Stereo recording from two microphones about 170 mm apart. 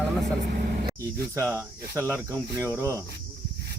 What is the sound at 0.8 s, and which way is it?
Speech, 20° right (ahead or behind).